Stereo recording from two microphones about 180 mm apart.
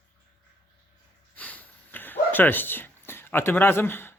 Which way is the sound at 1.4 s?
10° left (ahead or behind).